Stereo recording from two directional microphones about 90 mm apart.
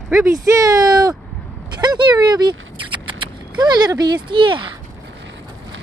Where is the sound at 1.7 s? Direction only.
50° right (ahead or behind).